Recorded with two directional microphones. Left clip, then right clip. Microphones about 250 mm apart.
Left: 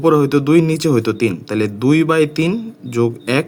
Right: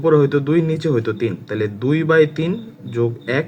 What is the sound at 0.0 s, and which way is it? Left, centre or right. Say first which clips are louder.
A man's voice: left 1 dB; left.